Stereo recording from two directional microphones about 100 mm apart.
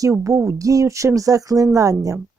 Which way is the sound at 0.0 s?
30° right (ahead or behind).